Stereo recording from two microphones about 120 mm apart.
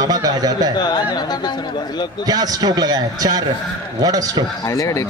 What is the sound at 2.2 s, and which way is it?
Speech, 30° right (ahead or behind).